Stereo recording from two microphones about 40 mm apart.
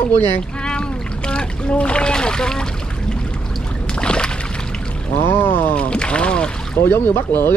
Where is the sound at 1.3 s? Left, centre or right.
Left.